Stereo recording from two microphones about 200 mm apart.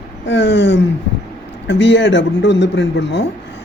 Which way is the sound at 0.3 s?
60° left (ahead or behind).